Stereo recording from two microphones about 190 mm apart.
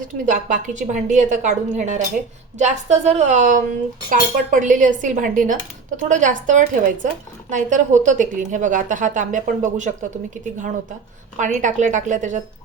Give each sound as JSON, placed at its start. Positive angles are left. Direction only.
{"t": 0.3, "sound": "a woman's voice", "side_deg": -40}
{"t": 11.3, "sound": "a woman's voice", "side_deg": -40}